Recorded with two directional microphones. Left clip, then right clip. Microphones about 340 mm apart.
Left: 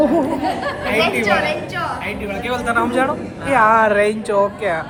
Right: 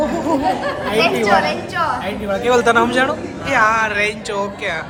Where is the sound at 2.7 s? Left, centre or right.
Centre.